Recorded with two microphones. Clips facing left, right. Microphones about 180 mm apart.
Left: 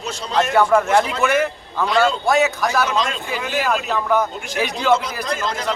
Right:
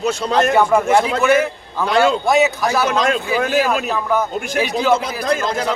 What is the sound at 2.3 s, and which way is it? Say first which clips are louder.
Speech: right 2 dB; 10° right (ahead or behind).